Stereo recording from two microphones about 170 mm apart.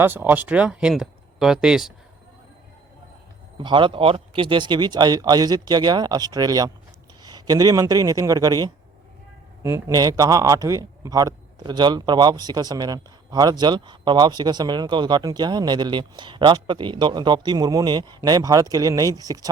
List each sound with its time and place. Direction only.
0.0 s speech: 10° right (ahead or behind)
3.6 s a man's voice: 30° right (ahead or behind)